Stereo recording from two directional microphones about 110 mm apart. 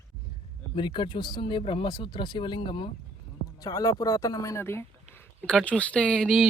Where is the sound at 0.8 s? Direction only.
45° left (ahead or behind).